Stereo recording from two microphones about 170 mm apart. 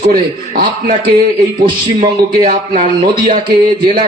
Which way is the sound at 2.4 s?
55° right (ahead or behind).